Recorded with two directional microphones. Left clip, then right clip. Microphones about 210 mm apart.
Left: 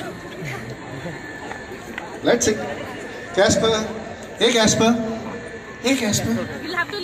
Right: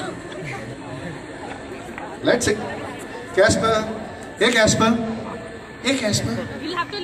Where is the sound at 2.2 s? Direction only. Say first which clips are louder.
Left 1 dB; 45° left (ahead or behind).